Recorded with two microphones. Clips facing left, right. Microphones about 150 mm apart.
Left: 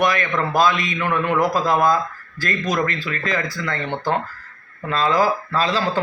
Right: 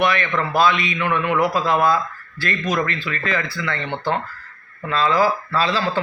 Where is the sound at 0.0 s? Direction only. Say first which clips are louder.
Even; 40° left (ahead or behind).